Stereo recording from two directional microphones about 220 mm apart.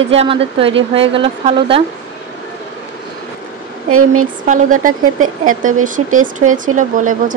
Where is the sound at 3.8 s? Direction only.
75° right (ahead or behind).